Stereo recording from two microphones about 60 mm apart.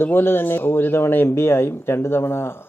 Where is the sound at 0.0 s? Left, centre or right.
Left.